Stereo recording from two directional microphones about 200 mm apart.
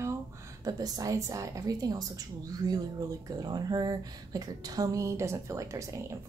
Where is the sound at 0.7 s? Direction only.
20° right (ahead or behind).